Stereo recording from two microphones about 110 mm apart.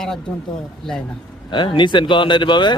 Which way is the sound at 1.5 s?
45° left (ahead or behind).